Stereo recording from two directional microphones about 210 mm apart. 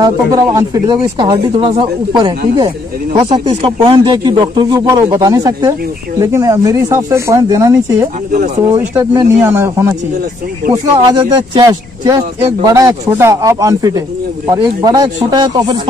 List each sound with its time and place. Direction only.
0.0 s speech: 15° right (ahead or behind)
10.7 s speech: 20° right (ahead or behind)